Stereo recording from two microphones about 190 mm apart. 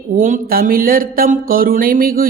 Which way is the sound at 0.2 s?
45° right (ahead or behind).